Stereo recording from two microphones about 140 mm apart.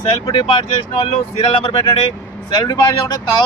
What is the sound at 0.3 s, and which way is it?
Speech, 40° left (ahead or behind).